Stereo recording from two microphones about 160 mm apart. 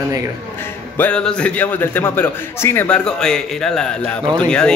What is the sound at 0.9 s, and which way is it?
A man's voice, 10° left (ahead or behind).